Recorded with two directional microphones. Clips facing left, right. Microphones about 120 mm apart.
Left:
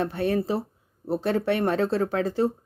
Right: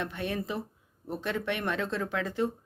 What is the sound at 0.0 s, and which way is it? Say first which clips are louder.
Speech: left 8 dB; 35° left (ahead or behind).